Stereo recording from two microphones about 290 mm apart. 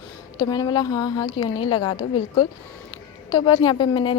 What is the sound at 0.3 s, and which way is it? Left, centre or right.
A woman's voice, centre.